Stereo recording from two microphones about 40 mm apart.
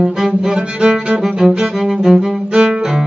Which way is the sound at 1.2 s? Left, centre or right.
Centre.